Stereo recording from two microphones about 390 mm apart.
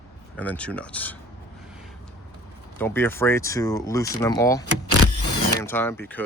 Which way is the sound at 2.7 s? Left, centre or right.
Centre.